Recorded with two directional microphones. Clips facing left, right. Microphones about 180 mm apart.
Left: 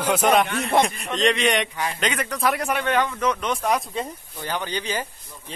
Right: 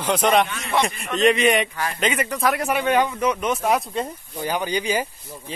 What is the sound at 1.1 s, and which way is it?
Speech, 5° right (ahead or behind).